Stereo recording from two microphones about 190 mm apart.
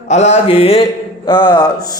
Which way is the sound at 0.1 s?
35° left (ahead or behind).